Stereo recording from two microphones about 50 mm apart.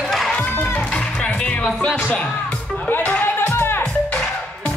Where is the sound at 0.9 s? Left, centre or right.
Centre.